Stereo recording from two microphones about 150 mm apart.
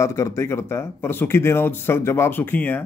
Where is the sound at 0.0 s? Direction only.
20° left (ahead or behind).